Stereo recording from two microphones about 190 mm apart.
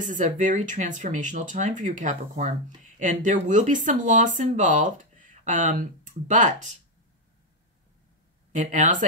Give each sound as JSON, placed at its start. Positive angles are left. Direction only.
{"t": 0.0, "sound": "speech", "side_deg": -45}
{"t": 8.5, "sound": "speech", "side_deg": -40}